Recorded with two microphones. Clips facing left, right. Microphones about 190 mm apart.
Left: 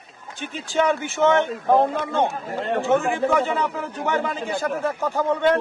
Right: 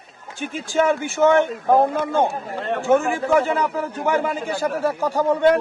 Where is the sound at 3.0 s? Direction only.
20° left (ahead or behind).